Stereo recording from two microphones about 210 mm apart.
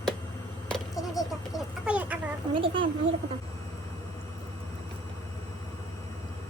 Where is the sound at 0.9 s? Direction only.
15° left (ahead or behind).